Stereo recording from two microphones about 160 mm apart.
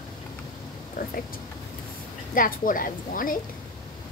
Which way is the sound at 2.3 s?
60° left (ahead or behind).